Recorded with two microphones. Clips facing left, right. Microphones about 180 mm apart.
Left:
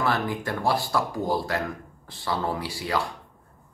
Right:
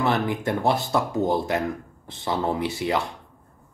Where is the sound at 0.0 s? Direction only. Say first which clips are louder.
Right 3 dB; 20° right (ahead or behind).